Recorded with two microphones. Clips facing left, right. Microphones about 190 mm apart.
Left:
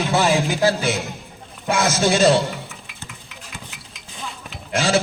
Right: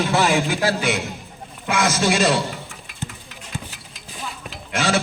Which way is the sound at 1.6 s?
25° left (ahead or behind).